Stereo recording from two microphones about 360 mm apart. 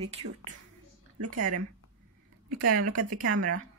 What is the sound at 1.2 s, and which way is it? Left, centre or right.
Speech, right.